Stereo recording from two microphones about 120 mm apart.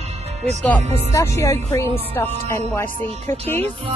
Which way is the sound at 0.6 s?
15° left (ahead or behind).